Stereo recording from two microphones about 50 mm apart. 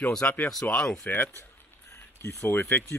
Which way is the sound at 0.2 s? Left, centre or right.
Left.